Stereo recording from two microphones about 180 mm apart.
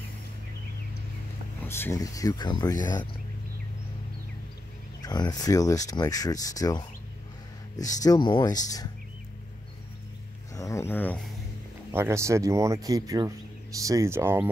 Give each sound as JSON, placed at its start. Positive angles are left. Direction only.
{"t": 1.6, "sound": "speech", "side_deg": 15}
{"t": 5.0, "sound": "speech", "side_deg": 20}
{"t": 8.0, "sound": "speech", "side_deg": 20}
{"t": 10.5, "sound": "speech", "side_deg": 15}
{"t": 11.9, "sound": "speech", "side_deg": -15}